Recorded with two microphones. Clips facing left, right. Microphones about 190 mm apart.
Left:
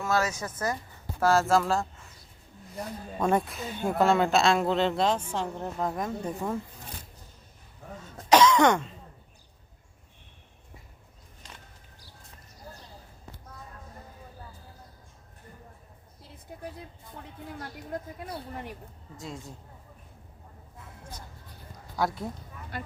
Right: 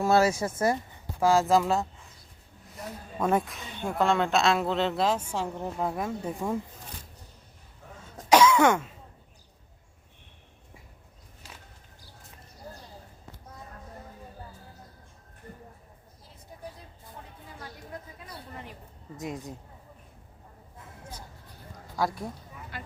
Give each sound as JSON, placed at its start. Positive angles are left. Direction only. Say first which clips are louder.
{"t": 0.0, "sound": "speech", "louder": "right 5 dB", "side_deg": -30}
{"t": 1.2, "sound": "speech", "louder": "right 1 dB", "side_deg": -15}
{"t": 3.2, "sound": "a woman's voice", "louder": "even", "side_deg": 0}
{"t": 8.3, "sound": "cough", "louder": "even", "side_deg": -10}
{"t": 11.4, "sound": "a sound", "louder": "even", "side_deg": -5}
{"t": 17.6, "sound": "speech", "louder": "left 4 dB", "side_deg": 60}
{"t": 19.1, "sound": "speech", "louder": "right 5 dB", "side_deg": -20}
{"t": 22.0, "sound": "a woman's voice", "louder": "even", "side_deg": 0}